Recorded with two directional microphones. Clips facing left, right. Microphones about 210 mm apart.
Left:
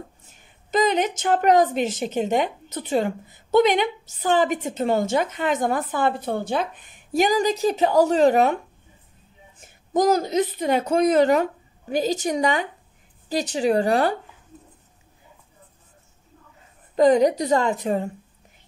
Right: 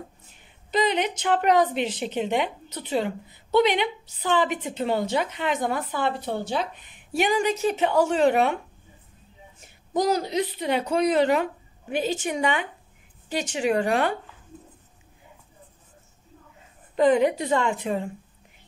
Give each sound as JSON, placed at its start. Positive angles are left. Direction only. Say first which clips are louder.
{"t": 0.3, "sound": "a woman's voice", "louder": "left 3 dB", "side_deg": 45}
{"t": 9.6, "sound": "a woman's voice", "louder": "left 4 dB", "side_deg": 50}
{"t": 16.9, "sound": "a woman's voice", "louder": "left 3 dB", "side_deg": 40}